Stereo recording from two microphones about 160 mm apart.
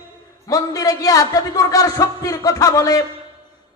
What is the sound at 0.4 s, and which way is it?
A man's voice, 20° left (ahead or behind).